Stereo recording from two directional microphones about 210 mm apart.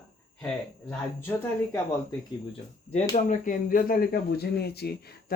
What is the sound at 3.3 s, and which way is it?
Speech, 40° left (ahead or behind).